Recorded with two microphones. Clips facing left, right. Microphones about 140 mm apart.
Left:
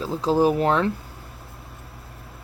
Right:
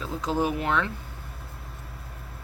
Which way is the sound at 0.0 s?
35° left (ahead or behind).